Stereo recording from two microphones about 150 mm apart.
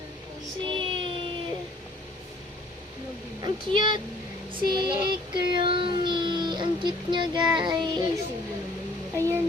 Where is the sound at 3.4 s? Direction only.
30° right (ahead or behind).